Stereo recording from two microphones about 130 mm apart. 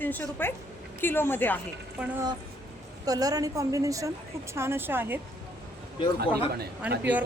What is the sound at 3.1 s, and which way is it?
A woman's voice, 30° right (ahead or behind).